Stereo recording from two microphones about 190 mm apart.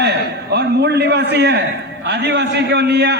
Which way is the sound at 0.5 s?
60° right (ahead or behind).